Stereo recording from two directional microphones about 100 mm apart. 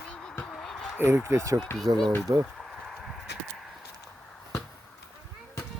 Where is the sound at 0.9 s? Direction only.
25° right (ahead or behind).